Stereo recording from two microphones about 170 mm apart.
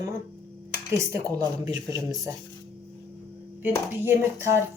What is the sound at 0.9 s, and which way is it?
Speech, 20° right (ahead or behind).